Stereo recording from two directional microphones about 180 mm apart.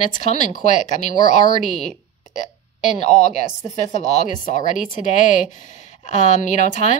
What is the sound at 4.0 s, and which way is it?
A woman's voice, 40° left (ahead or behind).